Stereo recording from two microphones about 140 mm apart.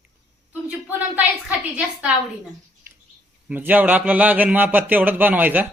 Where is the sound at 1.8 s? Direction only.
10° right (ahead or behind).